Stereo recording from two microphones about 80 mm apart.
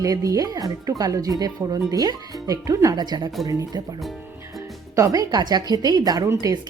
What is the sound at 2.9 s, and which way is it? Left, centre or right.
Speech, right.